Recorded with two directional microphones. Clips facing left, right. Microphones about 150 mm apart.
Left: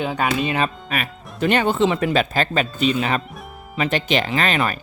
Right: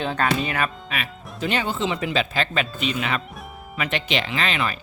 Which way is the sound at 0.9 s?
45° left (ahead or behind).